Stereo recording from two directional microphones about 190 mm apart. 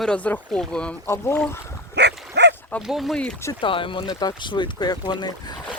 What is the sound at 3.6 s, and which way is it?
Speech, 25° left (ahead or behind).